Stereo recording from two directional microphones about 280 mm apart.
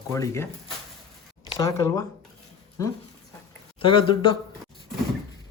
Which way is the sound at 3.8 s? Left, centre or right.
Centre.